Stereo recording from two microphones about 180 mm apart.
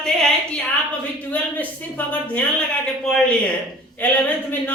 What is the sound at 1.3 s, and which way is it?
Speech, 10° left (ahead or behind).